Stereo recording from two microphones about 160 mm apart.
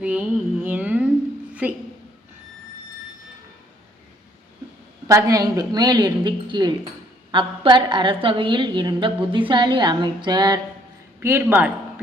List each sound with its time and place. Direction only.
0.0 s speech: 10° right (ahead or behind)
5.0 s a woman's voice: 20° right (ahead or behind)
11.2 s speech: 15° right (ahead or behind)